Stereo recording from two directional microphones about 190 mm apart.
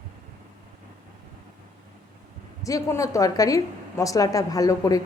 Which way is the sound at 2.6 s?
15° left (ahead or behind).